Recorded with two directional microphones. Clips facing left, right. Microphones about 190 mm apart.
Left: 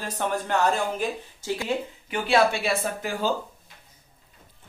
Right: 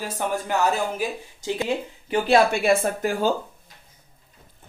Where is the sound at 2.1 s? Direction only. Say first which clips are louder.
Right 3 dB; 45° right (ahead or behind).